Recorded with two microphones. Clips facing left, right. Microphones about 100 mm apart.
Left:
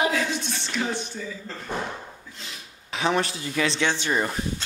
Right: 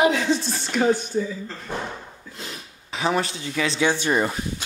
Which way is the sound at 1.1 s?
35° right (ahead or behind).